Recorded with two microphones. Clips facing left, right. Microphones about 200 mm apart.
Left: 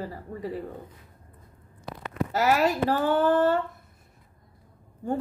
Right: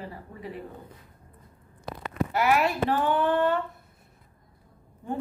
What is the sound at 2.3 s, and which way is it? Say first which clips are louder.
Speech: left 1 dB; 40° left (ahead or behind).